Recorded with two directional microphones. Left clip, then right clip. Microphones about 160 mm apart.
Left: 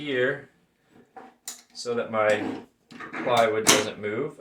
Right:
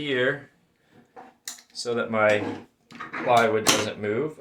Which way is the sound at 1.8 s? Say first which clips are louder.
Right 2 dB; 70° right (ahead or behind).